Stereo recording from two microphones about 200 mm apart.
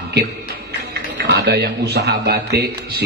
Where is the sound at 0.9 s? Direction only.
60° right (ahead or behind).